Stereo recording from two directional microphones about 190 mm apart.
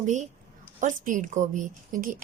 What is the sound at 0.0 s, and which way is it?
A woman's voice, 40° right (ahead or behind).